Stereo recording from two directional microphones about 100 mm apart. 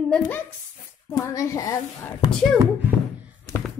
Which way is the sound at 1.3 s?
30° left (ahead or behind).